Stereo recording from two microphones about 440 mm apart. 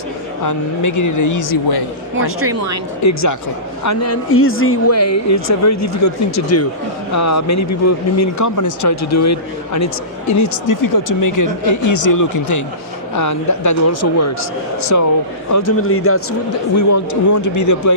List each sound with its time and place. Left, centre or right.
0.4 s speech: left
2.4 s a woman's voice: right
3.0 s speech: left